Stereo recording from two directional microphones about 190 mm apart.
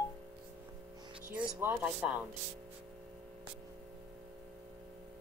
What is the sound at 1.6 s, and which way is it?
Speech, 10° right (ahead or behind).